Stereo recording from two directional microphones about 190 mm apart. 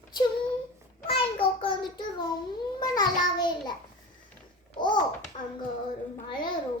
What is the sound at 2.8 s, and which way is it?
Child singing, 20° left (ahead or behind).